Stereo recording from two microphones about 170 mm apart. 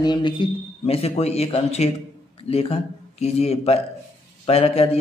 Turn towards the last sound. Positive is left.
turn(degrees=35)  # may be behind; listen again after turning